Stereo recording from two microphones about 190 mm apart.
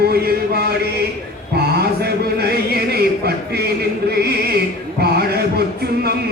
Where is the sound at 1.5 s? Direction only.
55° right (ahead or behind).